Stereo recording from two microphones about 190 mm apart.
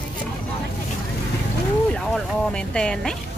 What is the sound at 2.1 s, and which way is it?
Speech, 5° left (ahead or behind).